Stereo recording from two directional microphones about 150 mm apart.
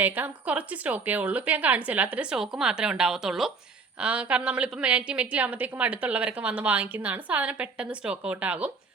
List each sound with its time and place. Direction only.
0.0 s a woman's voice: 10° right (ahead or behind)